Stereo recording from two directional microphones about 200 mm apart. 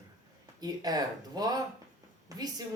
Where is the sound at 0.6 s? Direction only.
20° right (ahead or behind).